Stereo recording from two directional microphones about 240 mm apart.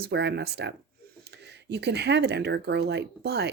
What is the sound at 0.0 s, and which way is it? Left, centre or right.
Speech, right.